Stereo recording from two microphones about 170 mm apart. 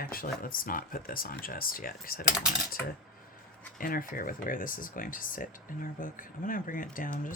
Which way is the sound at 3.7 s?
55° left (ahead or behind).